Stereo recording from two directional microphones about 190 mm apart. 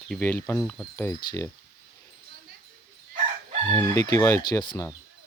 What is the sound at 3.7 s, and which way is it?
Speech, 15° left (ahead or behind).